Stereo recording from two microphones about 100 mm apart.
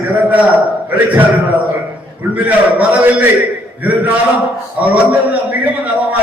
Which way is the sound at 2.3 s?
15° right (ahead or behind).